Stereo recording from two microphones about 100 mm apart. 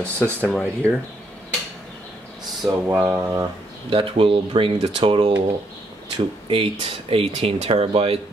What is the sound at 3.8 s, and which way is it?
Speech, 60° right (ahead or behind).